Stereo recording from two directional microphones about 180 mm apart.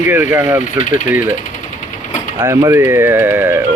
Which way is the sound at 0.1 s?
10° right (ahead or behind).